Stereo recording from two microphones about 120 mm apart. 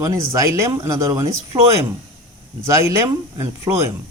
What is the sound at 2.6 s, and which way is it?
Speech, 25° right (ahead or behind).